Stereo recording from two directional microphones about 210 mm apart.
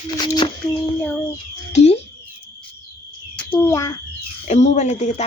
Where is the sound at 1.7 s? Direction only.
30° left (ahead or behind).